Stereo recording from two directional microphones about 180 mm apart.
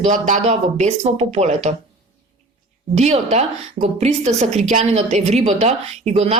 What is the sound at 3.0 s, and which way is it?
A woman's voice, 40° right (ahead or behind).